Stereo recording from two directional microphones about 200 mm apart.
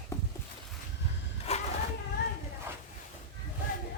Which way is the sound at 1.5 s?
30° left (ahead or behind).